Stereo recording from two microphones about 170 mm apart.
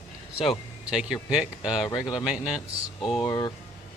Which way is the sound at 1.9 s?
25° left (ahead or behind).